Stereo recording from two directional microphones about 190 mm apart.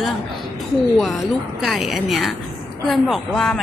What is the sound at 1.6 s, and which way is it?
A woman's voice, centre (ahead or behind).